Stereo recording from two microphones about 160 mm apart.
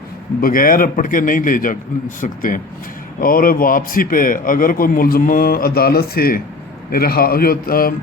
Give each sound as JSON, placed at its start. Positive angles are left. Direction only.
{"t": 0.4, "sound": "a man's voice", "side_deg": 60}